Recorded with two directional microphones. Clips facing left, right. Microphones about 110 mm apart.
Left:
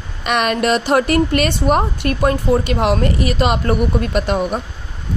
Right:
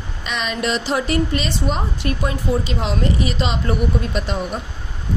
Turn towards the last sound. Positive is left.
turn(degrees=60)  # may be behind; listen again after turning